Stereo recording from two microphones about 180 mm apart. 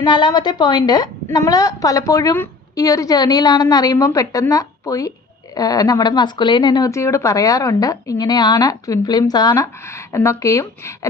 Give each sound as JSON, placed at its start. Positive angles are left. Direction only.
{"t": 0.0, "sound": "speech", "side_deg": 25}